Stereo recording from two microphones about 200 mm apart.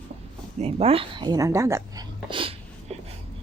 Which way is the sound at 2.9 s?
30° right (ahead or behind).